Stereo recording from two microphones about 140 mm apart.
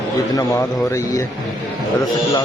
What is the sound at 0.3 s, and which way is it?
A man's voice, 20° left (ahead or behind).